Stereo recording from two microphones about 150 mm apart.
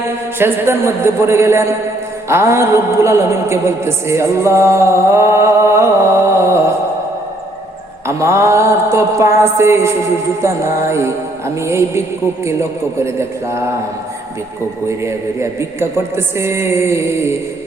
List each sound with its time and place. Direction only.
0.3 s a man's voice: 15° right (ahead or behind)
2.3 s music: 20° right (ahead or behind)
8.0 s music: 20° right (ahead or behind)
10.4 s a man's voice: 20° right (ahead or behind)
13.1 s a man's voice: 20° right (ahead or behind)
14.8 s a man's voice: 20° right (ahead or behind)